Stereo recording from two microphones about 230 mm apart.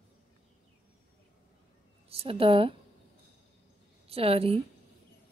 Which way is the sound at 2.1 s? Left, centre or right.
Right.